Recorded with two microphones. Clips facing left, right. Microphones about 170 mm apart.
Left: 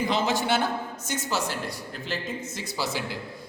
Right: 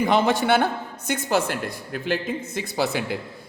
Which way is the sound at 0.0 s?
60° right (ahead or behind).